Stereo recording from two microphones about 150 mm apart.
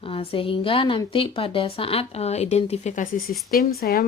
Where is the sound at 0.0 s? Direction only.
40° left (ahead or behind).